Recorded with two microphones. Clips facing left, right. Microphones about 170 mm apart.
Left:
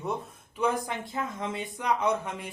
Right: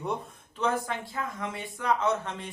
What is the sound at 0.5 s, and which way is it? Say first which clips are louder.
Speech: left 1 dB; 15° left (ahead or behind).